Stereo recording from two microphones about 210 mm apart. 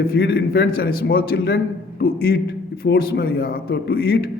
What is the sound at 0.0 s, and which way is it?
A man's voice, 50° left (ahead or behind).